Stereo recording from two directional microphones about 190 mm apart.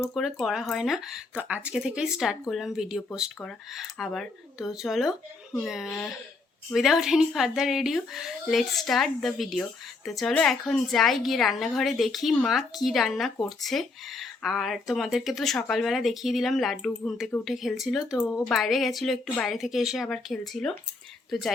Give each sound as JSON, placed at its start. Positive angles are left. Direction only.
{"t": 0.0, "sound": "a woman's voice", "side_deg": 0}